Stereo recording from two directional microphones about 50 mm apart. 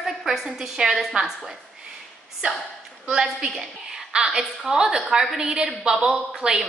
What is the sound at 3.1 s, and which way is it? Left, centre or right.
A woman's voice, centre.